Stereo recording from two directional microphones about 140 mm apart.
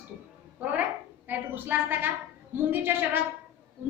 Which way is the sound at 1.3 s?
15° right (ahead or behind).